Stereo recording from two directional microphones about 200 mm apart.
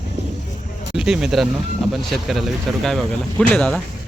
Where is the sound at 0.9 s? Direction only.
5° right (ahead or behind).